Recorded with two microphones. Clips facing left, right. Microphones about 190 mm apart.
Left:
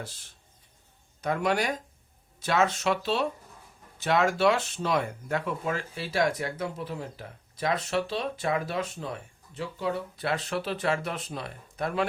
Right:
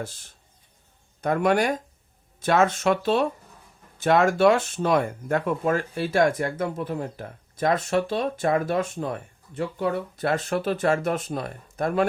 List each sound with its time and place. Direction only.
1.2 s speech: 50° right (ahead or behind)